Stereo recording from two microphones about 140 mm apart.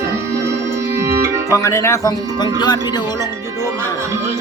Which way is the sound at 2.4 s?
30° left (ahead or behind).